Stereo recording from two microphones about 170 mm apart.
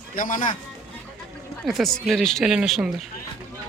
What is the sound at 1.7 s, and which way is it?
Speech, centre (ahead or behind).